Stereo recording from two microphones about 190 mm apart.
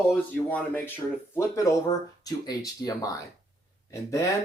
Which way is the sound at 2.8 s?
15° left (ahead or behind).